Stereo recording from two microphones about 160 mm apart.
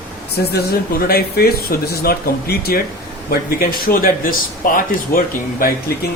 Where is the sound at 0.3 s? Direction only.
75° left (ahead or behind).